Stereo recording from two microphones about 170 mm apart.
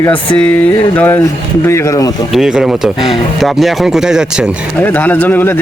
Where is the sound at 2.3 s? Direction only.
5° right (ahead or behind).